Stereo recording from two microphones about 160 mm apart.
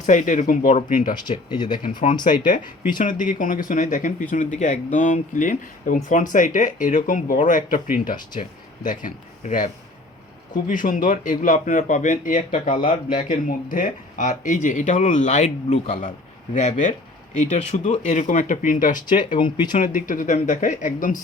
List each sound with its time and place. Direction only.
0.0 s speech: 50° left (ahead or behind)
1.1 s speech: 30° left (ahead or behind)
1.8 s speech: 55° left (ahead or behind)
10.7 s speech: 55° left (ahead or behind)